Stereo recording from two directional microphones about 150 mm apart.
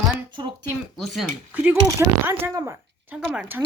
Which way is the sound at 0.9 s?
Centre (ahead or behind).